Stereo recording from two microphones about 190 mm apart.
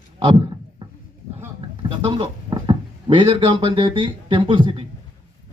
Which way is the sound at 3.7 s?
25° right (ahead or behind).